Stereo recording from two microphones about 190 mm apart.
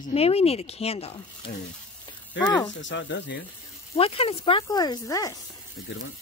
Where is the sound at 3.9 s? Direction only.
30° left (ahead or behind).